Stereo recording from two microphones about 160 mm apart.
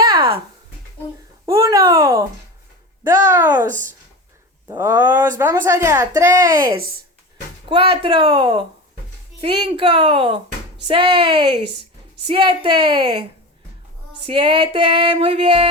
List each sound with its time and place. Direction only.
0.0 s a sound: 30° right (ahead or behind)
1.5 s a sound: 20° right (ahead or behind)
3.3 s a woman's voice: 10° right (ahead or behind)
4.7 s a woman's voice: 15° right (ahead or behind)
7.7 s music: 35° right (ahead or behind)
12.3 s speech: 30° right (ahead or behind)
14.3 s music: 30° right (ahead or behind)